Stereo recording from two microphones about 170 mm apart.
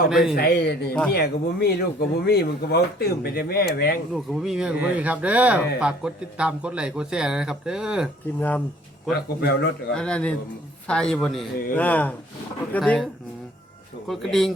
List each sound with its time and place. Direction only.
0.1 s a man's voice: centre (ahead or behind)
0.3 s speech: 70° left (ahead or behind)
4.1 s a man's voice: centre (ahead or behind)
8.4 s speech: 10° left (ahead or behind)
9.9 s a man's voice: 5° left (ahead or behind)
14.1 s a man's voice: centre (ahead or behind)